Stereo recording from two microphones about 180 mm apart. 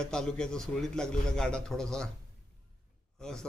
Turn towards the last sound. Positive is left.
turn(degrees=5)  # may be behind; listen again after turning